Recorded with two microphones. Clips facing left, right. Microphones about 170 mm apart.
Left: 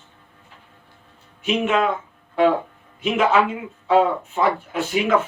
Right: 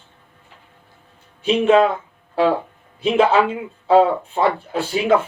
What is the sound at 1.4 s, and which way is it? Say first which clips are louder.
Speech: right 6 dB; 30° right (ahead or behind).